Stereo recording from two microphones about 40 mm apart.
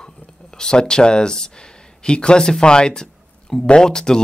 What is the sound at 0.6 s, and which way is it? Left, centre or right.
Speech, centre.